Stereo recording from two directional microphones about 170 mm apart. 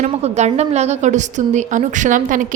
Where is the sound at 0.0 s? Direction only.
40° right (ahead or behind).